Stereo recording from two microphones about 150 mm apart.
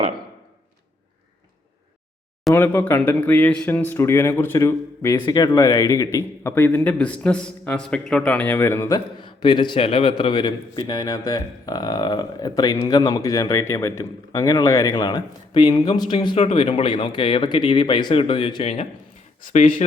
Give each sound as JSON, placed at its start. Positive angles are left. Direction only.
{"t": 2.5, "sound": "a man's voice", "side_deg": 15}
{"t": 9.2, "sound": "a man's voice", "side_deg": 30}
{"t": 19.4, "sound": "speech", "side_deg": 60}